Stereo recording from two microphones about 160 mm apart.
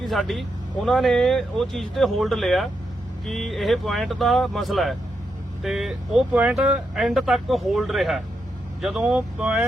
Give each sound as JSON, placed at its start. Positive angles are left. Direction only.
{"t": 0.0, "sound": "speech", "side_deg": 0}